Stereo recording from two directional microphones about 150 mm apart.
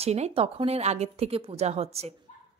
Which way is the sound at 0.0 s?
45° right (ahead or behind).